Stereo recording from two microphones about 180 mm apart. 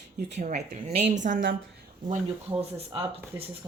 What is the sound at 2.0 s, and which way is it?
Speech, 35° right (ahead or behind).